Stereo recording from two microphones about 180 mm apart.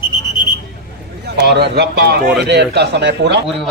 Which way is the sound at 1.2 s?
65° right (ahead or behind).